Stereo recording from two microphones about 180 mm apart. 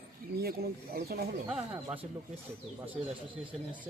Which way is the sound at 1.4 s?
5° right (ahead or behind).